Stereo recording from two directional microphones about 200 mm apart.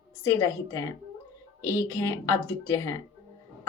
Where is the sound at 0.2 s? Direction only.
15° left (ahead or behind).